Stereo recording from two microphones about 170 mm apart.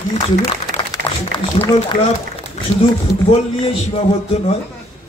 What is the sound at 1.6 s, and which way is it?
Speech, 40° left (ahead or behind).